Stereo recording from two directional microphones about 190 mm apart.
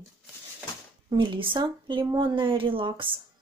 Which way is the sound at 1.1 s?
25° right (ahead or behind).